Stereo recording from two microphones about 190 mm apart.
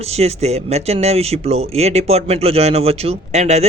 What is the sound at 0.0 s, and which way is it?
Speech, 35° right (ahead or behind).